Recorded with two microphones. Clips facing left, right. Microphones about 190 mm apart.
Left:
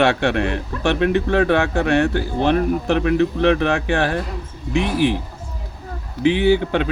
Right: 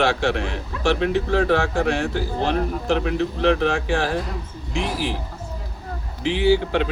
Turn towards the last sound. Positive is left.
turn(degrees=60)  # may be behind; listen again after turning